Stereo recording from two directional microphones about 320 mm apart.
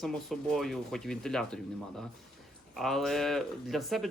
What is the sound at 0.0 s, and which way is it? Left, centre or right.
Speech, centre.